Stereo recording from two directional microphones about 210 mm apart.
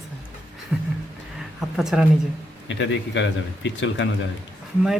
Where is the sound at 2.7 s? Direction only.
60° left (ahead or behind).